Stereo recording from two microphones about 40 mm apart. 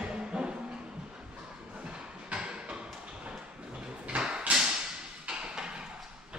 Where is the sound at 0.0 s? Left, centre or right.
Right.